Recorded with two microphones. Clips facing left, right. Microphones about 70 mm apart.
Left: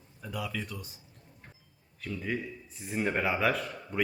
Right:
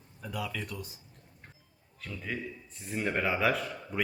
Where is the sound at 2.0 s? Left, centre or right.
Centre.